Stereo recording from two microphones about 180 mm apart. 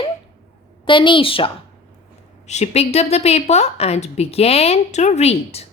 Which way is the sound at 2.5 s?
35° left (ahead or behind).